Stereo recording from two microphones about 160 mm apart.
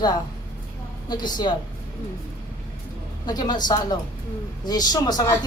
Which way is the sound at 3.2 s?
25° left (ahead or behind).